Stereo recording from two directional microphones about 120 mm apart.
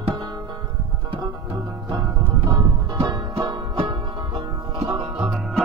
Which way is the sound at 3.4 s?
40° right (ahead or behind).